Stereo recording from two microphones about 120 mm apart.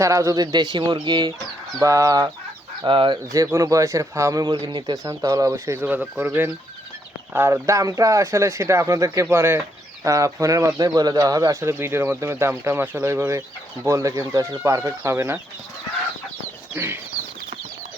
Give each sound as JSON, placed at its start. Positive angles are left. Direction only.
{"t": 0.0, "sound": "speech", "side_deg": -25}
{"t": 2.8, "sound": "speech", "side_deg": -45}
{"t": 3.3, "sound": "speech", "side_deg": -25}
{"t": 5.8, "sound": "speech", "side_deg": -15}
{"t": 7.3, "sound": "speech", "side_deg": -20}
{"t": 16.7, "sound": "speech", "side_deg": -15}